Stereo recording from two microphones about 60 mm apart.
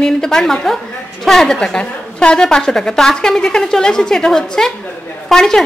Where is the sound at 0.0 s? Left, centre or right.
Centre.